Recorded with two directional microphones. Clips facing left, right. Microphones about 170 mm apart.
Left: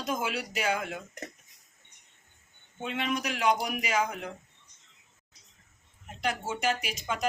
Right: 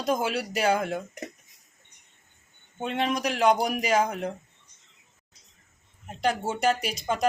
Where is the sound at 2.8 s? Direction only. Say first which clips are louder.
Right 5 dB; 35° right (ahead or behind).